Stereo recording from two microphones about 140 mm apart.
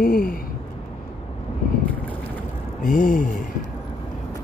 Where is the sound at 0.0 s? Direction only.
90° left.